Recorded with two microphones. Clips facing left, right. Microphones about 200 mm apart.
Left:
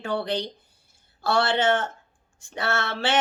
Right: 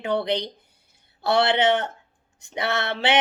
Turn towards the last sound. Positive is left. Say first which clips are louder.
# right 2 dB
turn(degrees=-20)  # may be behind; listen again after turning